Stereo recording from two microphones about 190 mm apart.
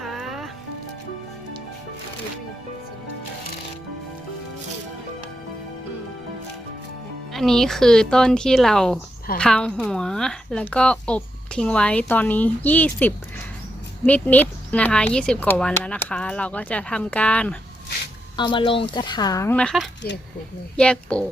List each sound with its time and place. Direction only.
0.0 s music: centre (ahead or behind)
7.3 s speech: centre (ahead or behind)
18.3 s speech: 25° left (ahead or behind)
19.5 s speech: centre (ahead or behind)